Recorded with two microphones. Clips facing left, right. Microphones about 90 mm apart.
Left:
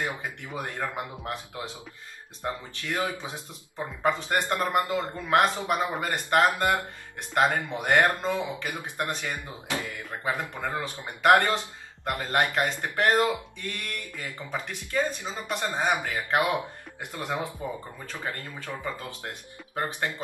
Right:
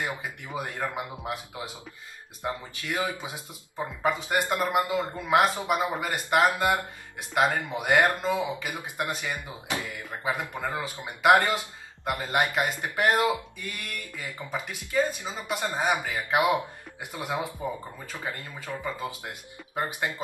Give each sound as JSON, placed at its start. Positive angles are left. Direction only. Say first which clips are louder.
{"t": 0.2, "sound": "speech", "louder": "even", "side_deg": -10}
{"t": 5.9, "sound": "speech", "louder": "even", "side_deg": -5}
{"t": 6.6, "sound": "speech", "louder": "even", "side_deg": -15}
{"t": 18.9, "sound": "speech", "louder": "right 3 dB", "side_deg": -10}